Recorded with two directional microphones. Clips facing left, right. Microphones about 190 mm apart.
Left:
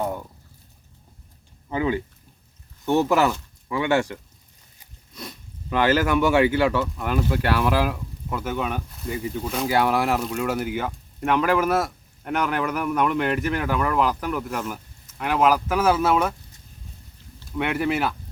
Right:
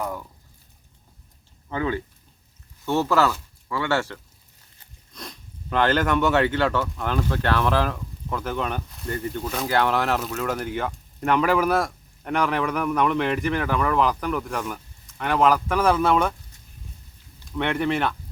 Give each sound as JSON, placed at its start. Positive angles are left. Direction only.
{"t": 0.0, "sound": "a sound", "side_deg": 25}
{"t": 1.7, "sound": "speech", "side_deg": 15}
{"t": 4.8, "sound": "speech", "side_deg": 5}
{"t": 17.6, "sound": "speech", "side_deg": 5}